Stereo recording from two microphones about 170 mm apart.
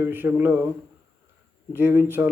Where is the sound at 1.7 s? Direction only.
10° right (ahead or behind).